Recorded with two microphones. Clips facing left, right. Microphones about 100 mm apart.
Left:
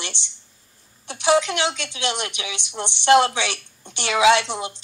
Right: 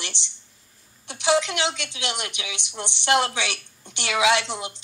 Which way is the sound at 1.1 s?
35° left (ahead or behind).